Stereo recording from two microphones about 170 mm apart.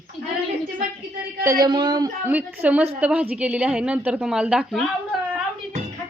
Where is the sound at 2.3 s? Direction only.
10° right (ahead or behind).